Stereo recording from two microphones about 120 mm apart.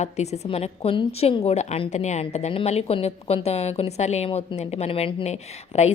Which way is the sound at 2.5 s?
55° left (ahead or behind).